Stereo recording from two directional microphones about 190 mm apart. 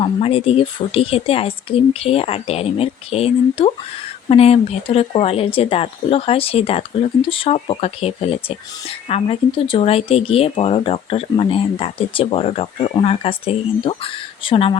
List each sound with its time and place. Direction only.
0.0 s speech: 30° left (ahead or behind)